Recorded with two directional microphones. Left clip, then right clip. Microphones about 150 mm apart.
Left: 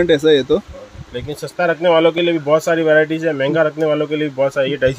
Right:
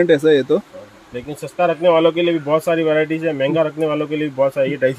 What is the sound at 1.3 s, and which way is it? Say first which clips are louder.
Speech: even; 25° left (ahead or behind).